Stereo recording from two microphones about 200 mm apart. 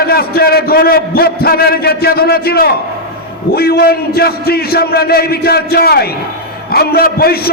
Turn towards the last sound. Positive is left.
turn(degrees=50)  # may be behind; listen again after turning